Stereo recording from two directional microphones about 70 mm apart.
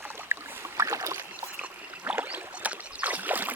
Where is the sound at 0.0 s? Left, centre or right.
Right.